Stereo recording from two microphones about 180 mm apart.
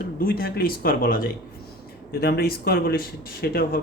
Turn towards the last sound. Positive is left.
turn(degrees=55)  # may be behind; listen again after turning